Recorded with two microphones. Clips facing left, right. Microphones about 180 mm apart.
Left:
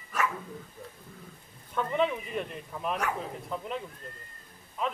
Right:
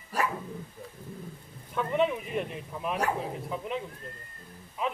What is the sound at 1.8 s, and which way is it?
Speech, 5° right (ahead or behind).